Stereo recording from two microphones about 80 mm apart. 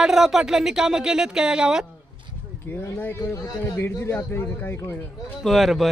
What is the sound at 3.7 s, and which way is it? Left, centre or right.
A man's voice, left.